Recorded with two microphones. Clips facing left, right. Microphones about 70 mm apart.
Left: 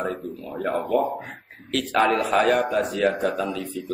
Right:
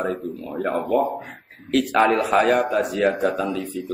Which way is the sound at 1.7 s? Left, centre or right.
Centre.